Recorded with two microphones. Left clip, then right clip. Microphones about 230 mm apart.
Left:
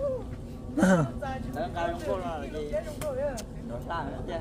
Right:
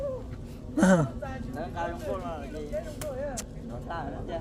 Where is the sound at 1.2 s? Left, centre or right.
Left.